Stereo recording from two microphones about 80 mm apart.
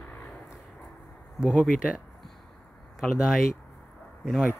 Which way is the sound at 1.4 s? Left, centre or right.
Centre.